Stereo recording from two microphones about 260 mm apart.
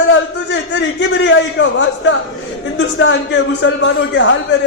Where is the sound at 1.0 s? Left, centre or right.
Left.